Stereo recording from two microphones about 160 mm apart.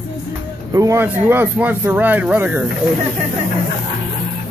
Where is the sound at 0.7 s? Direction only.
15° right (ahead or behind).